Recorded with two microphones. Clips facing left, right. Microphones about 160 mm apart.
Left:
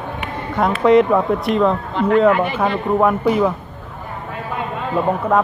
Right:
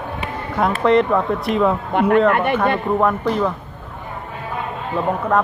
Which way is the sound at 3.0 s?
5° left (ahead or behind).